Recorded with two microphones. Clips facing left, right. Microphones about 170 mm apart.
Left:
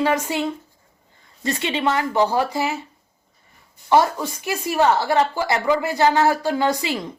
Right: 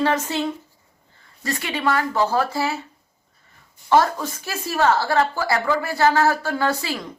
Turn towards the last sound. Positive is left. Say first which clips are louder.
# left 2 dB
turn(degrees=20)  # may be behind; listen again after turning